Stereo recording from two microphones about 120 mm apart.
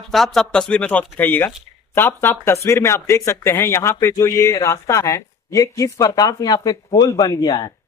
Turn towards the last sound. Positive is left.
turn(degrees=35)  # may be behind; listen again after turning